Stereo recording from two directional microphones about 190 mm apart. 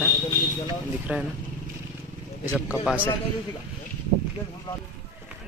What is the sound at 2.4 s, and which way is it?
Speech, 10° right (ahead or behind).